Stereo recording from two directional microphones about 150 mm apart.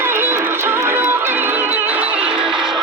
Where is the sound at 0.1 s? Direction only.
15° right (ahead or behind).